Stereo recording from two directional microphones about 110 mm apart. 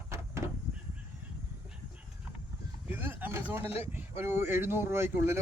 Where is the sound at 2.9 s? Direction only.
20° right (ahead or behind).